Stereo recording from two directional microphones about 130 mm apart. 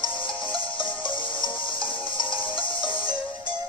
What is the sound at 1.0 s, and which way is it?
Music, 40° left (ahead or behind).